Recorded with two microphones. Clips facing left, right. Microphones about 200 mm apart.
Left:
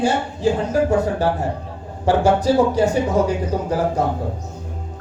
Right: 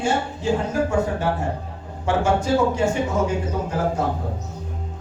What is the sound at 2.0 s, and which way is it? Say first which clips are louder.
Speech: left 4 dB; 35° left (ahead or behind).